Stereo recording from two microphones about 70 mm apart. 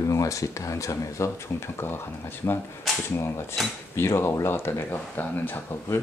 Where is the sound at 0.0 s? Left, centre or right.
Left.